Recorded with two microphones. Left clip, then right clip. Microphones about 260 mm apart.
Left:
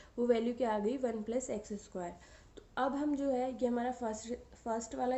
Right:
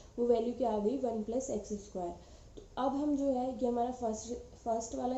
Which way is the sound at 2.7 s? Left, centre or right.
Left.